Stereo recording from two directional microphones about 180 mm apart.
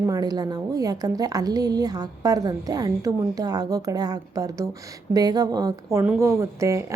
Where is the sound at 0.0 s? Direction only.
20° right (ahead or behind).